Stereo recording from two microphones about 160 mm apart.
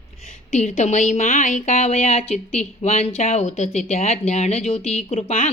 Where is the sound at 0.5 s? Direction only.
45° left (ahead or behind).